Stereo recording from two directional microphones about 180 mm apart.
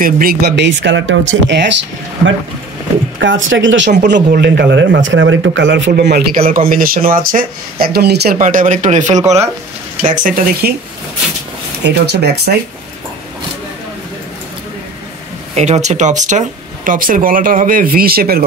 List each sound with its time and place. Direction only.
0.0 s speech: 55° right (ahead or behind); by 1.7 s 85° right
3.2 s speech: 90° right
4.1 s speech: 65° right (ahead or behind)
8.4 s speech: 45° right (ahead or behind)
11.8 s speech: 65° right (ahead or behind)
15.5 s speech: 40° right (ahead or behind); by 18.4 s 55° right (ahead or behind)